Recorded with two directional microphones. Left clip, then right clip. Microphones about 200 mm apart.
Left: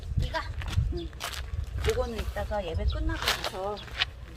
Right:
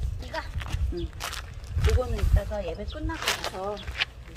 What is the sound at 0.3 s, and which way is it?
Horse, 10° right (ahead or behind).